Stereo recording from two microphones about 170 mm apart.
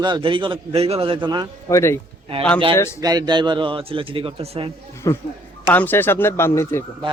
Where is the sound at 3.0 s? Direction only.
25° right (ahead or behind).